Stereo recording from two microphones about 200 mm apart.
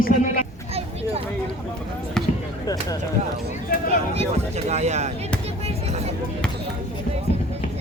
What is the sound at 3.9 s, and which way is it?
Speech, 30° right (ahead or behind).